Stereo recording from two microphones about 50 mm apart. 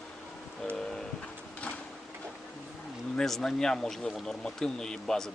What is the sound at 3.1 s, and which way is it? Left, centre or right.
Speech, centre.